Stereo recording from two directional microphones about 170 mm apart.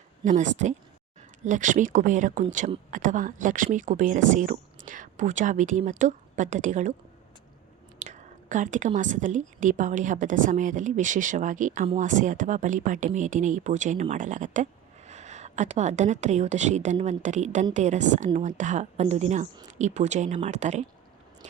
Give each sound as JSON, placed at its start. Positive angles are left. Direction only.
{"t": 0.3, "sound": "speech", "side_deg": -45}
{"t": 7.9, "sound": "whispering", "side_deg": -45}
{"t": 9.0, "sound": "speech", "side_deg": -50}